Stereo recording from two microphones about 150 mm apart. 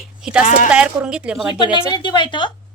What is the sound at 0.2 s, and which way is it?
Speech, 5° right (ahead or behind).